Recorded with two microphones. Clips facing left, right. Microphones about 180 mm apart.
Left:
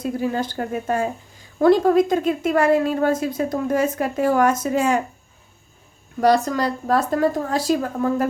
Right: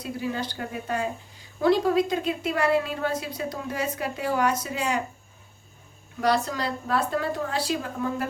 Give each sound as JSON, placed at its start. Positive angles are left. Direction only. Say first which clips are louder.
{"t": 0.0, "sound": "a woman's voice", "louder": "left 7 dB", "side_deg": 45}
{"t": 6.1, "sound": "a woman's voice", "louder": "left 7 dB", "side_deg": 45}